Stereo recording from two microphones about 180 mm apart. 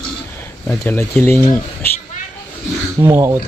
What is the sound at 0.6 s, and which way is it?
Speech, 10° left (ahead or behind).